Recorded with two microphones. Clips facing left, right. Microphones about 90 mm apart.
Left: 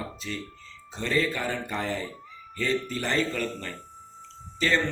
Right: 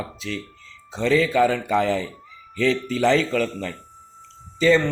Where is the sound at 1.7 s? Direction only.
90° right.